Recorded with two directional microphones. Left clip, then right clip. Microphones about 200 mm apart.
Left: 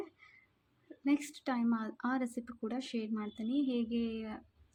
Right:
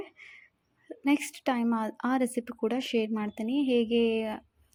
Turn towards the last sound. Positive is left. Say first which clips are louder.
# right 13 dB
turn(degrees=-25)  # may be behind; listen again after turning